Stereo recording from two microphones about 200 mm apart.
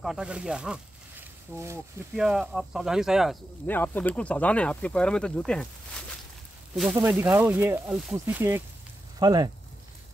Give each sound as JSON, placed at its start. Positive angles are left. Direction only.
{"t": 0.0, "sound": "speech", "side_deg": -5}
{"t": 3.6, "sound": "speech", "side_deg": 10}
{"t": 6.7, "sound": "speech", "side_deg": 0}